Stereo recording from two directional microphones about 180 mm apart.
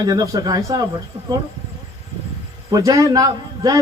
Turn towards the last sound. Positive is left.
turn(degrees=-20)  # may be behind; listen again after turning